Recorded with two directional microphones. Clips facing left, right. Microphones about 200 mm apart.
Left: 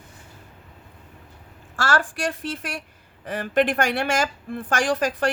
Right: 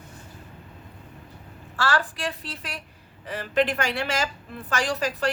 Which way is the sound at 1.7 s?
45° left (ahead or behind).